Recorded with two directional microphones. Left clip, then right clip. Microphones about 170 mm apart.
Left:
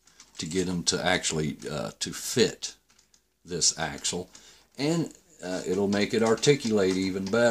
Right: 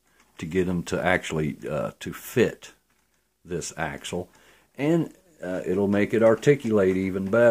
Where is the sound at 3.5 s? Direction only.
50° right (ahead or behind).